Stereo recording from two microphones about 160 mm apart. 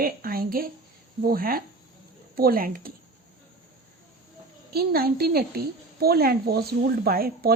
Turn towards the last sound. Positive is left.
turn(degrees=-70)  # may be behind; listen again after turning